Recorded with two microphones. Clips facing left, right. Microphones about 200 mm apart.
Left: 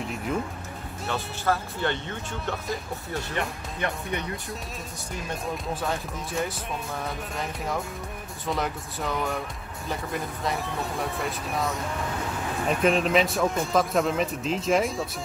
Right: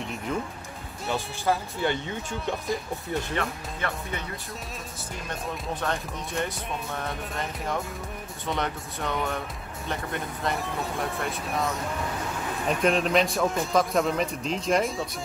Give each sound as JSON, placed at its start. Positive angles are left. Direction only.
{"t": 1.0, "sound": "speech", "side_deg": -10}
{"t": 3.3, "sound": "speech", "side_deg": 15}
{"t": 5.8, "sound": "a man's voice", "side_deg": 5}